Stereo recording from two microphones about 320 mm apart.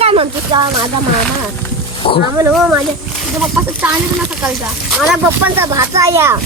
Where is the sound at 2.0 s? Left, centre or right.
Centre.